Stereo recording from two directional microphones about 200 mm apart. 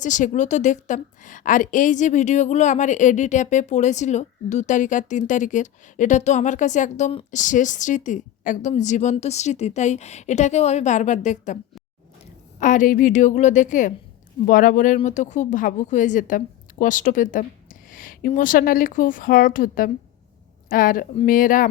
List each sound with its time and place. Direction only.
0.0 s a woman's voice: 40° left (ahead or behind)